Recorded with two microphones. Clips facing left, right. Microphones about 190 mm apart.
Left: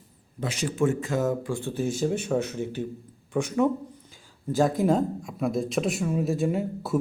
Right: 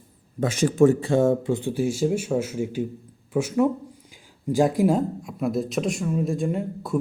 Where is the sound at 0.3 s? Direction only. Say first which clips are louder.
Right 8 dB; 45° right (ahead or behind).